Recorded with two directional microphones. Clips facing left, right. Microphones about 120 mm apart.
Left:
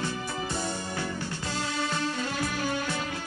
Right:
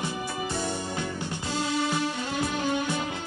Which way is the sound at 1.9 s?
20° right (ahead or behind).